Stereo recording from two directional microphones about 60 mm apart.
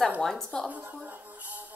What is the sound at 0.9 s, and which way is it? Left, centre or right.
Music, right.